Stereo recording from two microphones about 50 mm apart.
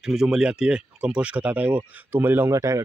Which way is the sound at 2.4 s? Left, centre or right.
Right.